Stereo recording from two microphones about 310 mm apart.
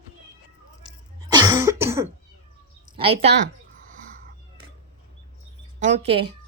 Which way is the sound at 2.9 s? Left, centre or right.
Centre.